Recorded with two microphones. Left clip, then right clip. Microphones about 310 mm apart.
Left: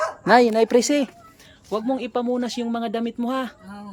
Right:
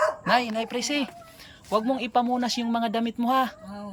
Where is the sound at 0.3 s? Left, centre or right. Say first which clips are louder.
Left 8 dB; centre.